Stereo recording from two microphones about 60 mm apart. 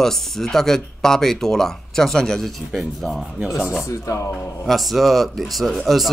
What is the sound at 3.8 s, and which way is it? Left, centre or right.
Speech, left.